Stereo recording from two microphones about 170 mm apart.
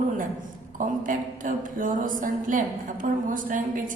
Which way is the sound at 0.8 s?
50° right (ahead or behind).